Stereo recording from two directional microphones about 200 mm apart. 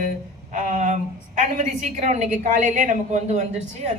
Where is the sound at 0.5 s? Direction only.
35° right (ahead or behind).